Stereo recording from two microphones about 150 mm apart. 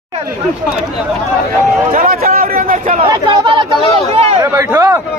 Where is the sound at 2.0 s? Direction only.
80° right.